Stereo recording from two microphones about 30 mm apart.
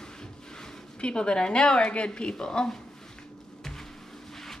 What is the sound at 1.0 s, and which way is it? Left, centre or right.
A woman's voice, left.